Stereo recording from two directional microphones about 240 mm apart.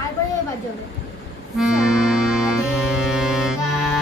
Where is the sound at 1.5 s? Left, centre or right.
Centre.